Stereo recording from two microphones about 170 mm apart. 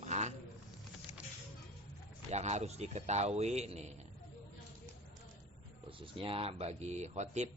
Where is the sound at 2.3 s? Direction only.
40° right (ahead or behind).